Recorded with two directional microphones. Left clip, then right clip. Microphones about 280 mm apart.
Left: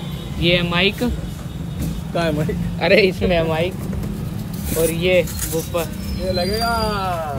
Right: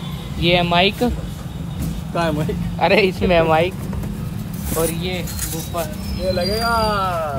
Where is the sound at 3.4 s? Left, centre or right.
Right.